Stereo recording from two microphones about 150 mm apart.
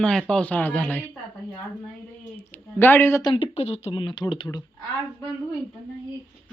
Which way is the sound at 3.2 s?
40° left (ahead or behind).